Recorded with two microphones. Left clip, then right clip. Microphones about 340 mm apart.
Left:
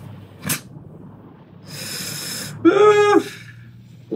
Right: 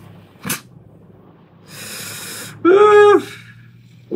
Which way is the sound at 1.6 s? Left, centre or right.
Centre.